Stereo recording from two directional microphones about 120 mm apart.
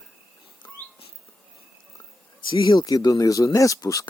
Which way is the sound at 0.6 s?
35° left (ahead or behind).